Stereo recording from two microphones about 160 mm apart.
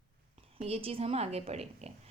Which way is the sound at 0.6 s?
35° right (ahead or behind).